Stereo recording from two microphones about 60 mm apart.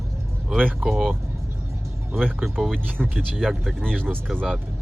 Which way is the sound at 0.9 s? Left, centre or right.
Centre.